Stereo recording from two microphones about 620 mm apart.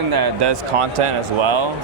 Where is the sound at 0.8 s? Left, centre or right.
Right.